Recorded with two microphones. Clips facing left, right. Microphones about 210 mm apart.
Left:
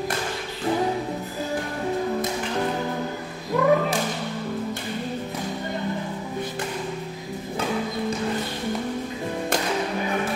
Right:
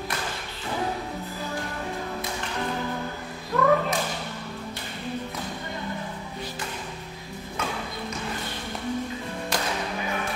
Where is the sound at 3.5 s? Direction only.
10° left (ahead or behind).